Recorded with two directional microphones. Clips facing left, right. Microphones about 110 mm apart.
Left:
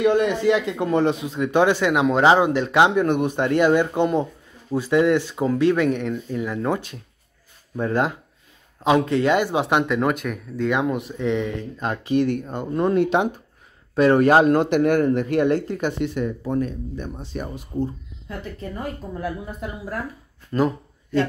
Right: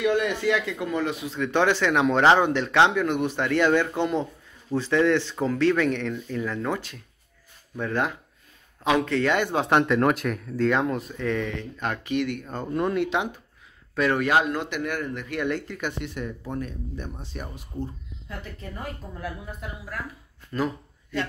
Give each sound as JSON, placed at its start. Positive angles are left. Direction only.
{"t": 0.0, "sound": "a man's voice", "side_deg": 35}
{"t": 7.8, "sound": "a man's voice", "side_deg": 35}
{"t": 9.1, "sound": "speech", "side_deg": 15}
{"t": 11.0, "sound": "speech", "side_deg": 20}
{"t": 11.8, "sound": "speech", "side_deg": 30}
{"t": 12.4, "sound": "a man's voice", "side_deg": 20}
{"t": 13.0, "sound": "speech", "side_deg": 40}
{"t": 19.1, "sound": "speech", "side_deg": 35}